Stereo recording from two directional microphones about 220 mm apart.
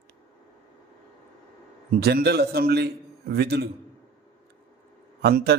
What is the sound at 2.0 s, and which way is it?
Speech, 45° right (ahead or behind).